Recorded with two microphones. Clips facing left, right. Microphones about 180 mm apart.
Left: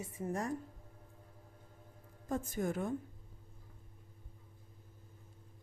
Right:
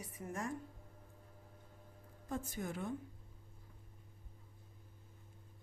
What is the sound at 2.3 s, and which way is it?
Speech, 45° left (ahead or behind).